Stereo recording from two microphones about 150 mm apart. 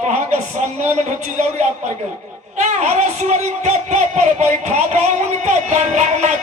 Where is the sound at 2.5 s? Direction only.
50° right (ahead or behind).